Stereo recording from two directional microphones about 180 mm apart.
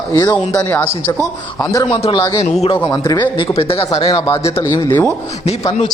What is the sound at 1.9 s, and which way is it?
Speech, 35° left (ahead or behind).